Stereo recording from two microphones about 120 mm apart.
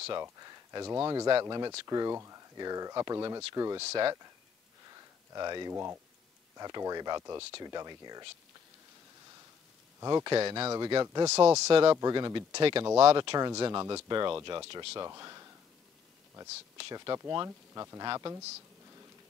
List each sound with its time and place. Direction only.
0.4 s speech: 30° right (ahead or behind)
5.3 s speech: 35° right (ahead or behind)
9.9 s speech: 35° right (ahead or behind)
11.2 s speech: 20° right (ahead or behind)
11.9 s speech: 35° right (ahead or behind)
13.5 s speech: 30° right (ahead or behind)
14.7 s speech: 50° right (ahead or behind)
15.0 s speech: 30° right (ahead or behind)
16.7 s speech: 30° right (ahead or behind)